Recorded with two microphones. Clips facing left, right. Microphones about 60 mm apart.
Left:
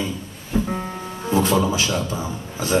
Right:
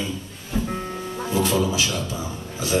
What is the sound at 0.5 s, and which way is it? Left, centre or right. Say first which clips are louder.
Music: left 4 dB; left.